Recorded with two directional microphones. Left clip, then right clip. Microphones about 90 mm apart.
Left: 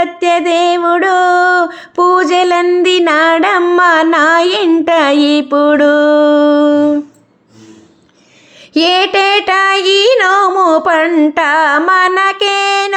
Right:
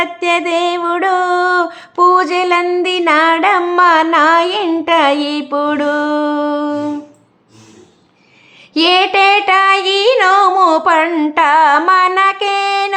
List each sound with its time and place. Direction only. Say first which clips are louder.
0.0 s a sound: left 3 dB; 20° left (ahead or behind)
2.8 s child singing: left 2 dB; 35° left (ahead or behind)
8.7 s child singing: left 1 dB; 40° left (ahead or behind)